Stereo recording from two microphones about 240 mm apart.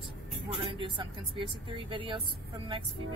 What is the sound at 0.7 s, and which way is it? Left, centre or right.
Speech, right.